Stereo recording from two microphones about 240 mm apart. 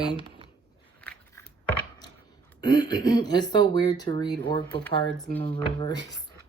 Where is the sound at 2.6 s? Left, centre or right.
Centre.